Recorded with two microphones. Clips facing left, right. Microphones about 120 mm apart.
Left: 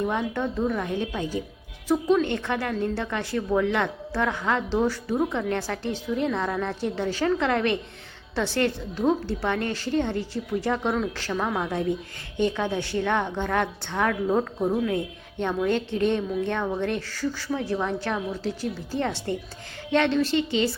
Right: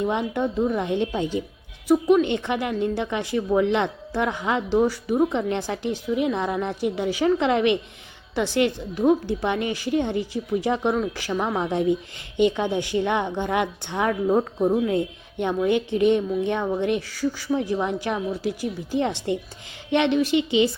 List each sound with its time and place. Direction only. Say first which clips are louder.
0.0 s speech: right 2 dB; 20° right (ahead or behind)
1.9 s a woman's voice: right 4 dB; 15° right (ahead or behind)